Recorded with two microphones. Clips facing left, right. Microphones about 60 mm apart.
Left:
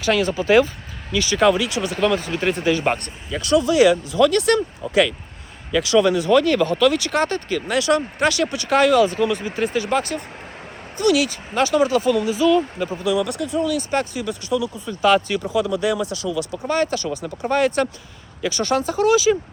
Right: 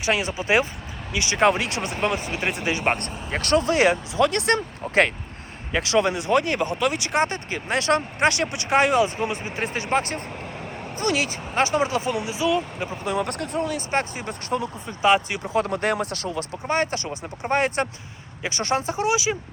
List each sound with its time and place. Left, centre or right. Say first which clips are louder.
0.0 s speech: left 5 dB; right
3.0 s speech: right 1 dB; right
4.8 s speech: left 2 dB; right
5.7 s speech: left 5 dB; right
7.8 s speech: left 2 dB; right; by 13.0 s centre
13.0 s speech: left 4 dB; right
15.0 s speech: left 3 dB; right
15.5 s speech: left 1 dB; right